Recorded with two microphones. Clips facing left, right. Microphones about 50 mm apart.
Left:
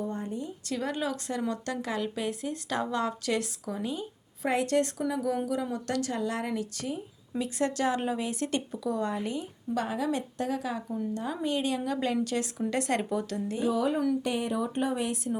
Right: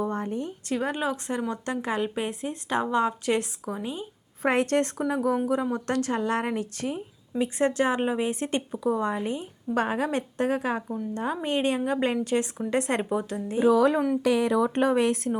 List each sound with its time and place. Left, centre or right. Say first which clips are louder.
0.0 s a sound: right 5 dB; right
0.7 s speech: right 4 dB; right
4.4 s a woman's voice: right 3 dB; right
9.7 s a woman's voice: right 4 dB; right
13.7 s speech: right 7 dB; right